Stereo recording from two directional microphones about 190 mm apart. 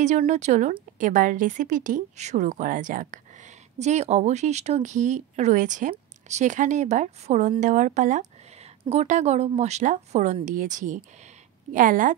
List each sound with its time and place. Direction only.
0.0 s speech: 40° right (ahead or behind)